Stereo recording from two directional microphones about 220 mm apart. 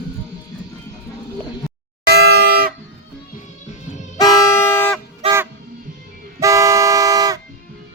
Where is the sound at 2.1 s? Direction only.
45° right (ahead or behind).